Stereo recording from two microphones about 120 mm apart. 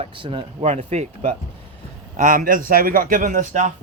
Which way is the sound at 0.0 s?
45° right (ahead or behind).